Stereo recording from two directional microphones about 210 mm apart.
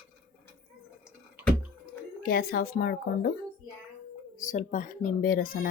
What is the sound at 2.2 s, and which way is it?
Speech, 45° left (ahead or behind).